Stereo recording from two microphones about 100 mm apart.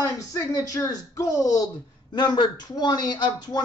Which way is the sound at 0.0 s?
35° left (ahead or behind).